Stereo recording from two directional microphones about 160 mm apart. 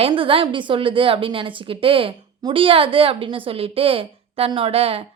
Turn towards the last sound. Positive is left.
turn(degrees=-40)  # may be behind; listen again after turning